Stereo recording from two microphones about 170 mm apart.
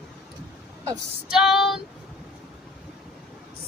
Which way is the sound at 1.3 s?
Centre (ahead or behind).